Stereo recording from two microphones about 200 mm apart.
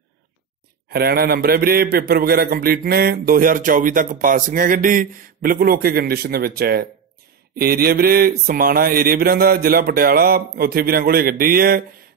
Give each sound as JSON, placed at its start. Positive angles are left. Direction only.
{"t": 0.8, "sound": "a man's voice", "side_deg": -50}